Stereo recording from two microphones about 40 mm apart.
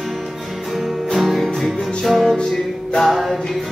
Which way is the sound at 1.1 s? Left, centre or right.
Centre.